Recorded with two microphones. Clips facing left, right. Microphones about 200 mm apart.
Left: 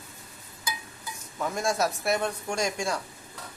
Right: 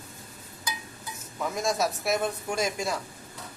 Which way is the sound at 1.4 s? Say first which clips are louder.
Even; centre (ahead or behind).